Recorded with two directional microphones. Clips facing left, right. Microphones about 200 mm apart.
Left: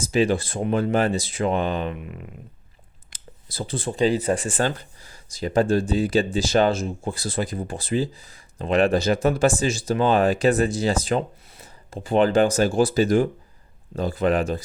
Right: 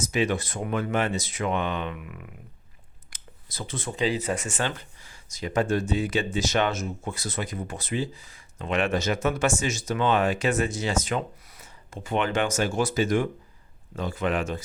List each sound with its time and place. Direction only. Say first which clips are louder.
0.0 s speech: left 5 dB; 30° left (ahead or behind)
3.1 s a sound: left 5 dB; 35° left (ahead or behind)
4.0 s speech: left 6 dB; 40° left (ahead or behind)